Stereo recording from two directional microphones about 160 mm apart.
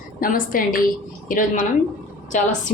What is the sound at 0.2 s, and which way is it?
A woman's voice, 60° left (ahead or behind).